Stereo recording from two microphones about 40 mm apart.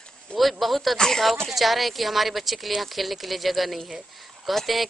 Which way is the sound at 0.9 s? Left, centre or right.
Centre.